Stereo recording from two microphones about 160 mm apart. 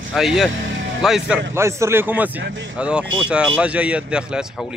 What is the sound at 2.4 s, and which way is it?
Speech, 90° right.